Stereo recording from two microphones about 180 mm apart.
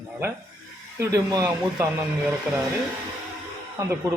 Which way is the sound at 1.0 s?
20° right (ahead or behind).